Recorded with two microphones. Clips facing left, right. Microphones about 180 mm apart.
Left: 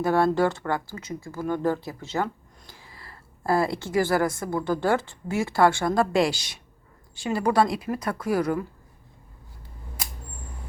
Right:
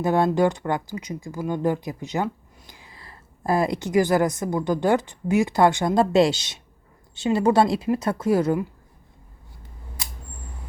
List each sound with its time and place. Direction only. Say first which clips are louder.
0.0 s a woman's voice: right 2 dB; 20° right (ahead or behind)